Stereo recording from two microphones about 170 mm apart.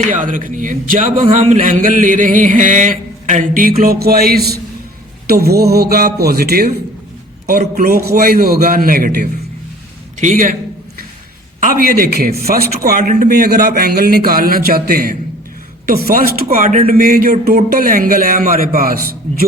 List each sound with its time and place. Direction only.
0.2 s a man's voice: 50° right (ahead or behind)
11.8 s a man's voice: 60° right (ahead or behind)